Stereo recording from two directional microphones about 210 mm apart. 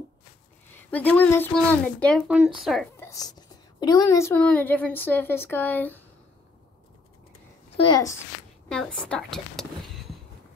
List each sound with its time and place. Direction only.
0.8 s speech: 10° left (ahead or behind)
2.2 s speech: 5° right (ahead or behind)
3.0 s a woman's voice: 15° left (ahead or behind)
7.7 s a child's voice: 20° left (ahead or behind)
8.6 s speech: 5° left (ahead or behind)